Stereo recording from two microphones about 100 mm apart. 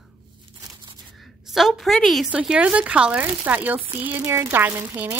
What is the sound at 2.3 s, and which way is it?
Speech, 10° right (ahead or behind).